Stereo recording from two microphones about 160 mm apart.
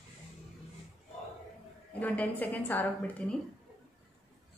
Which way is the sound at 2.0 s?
10° left (ahead or behind).